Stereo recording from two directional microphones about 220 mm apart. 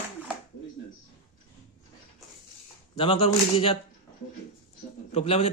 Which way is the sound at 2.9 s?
25° left (ahead or behind).